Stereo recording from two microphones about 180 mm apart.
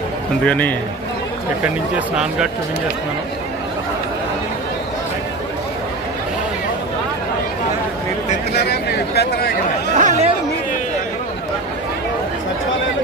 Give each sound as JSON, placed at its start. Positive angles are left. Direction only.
{"t": 0.5, "sound": "a man's voice", "side_deg": 10}
{"t": 1.6, "sound": "speech", "side_deg": -5}
{"t": 8.5, "sound": "a sound", "side_deg": 65}
{"t": 9.9, "sound": "chatter", "side_deg": -40}